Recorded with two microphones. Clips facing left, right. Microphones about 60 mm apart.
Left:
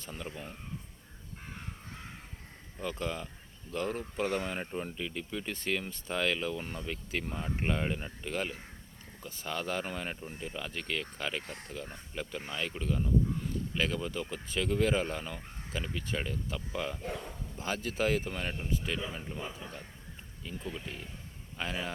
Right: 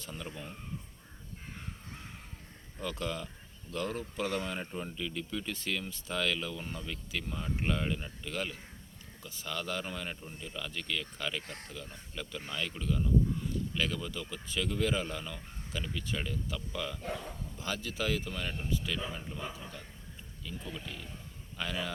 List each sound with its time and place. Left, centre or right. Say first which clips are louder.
0.0 s speech: even; left
2.8 s speech: left 1 dB; left
4.5 s speech: left 2 dB; left
13.7 s speech: left 5 dB; left
17.0 s bow-wow: even; centre
17.6 s speech: left 4 dB; left
19.1 s a man's voice: left 1 dB; centre
19.5 s speech: left 1 dB; left
20.6 s speech: left 3 dB; left